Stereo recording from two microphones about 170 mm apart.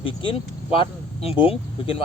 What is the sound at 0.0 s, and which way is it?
Speech, 30° left (ahead or behind).